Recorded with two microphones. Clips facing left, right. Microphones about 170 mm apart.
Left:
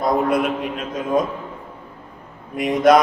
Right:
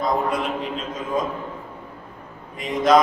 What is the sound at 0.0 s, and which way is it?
A man's voice, 65° left (ahead or behind).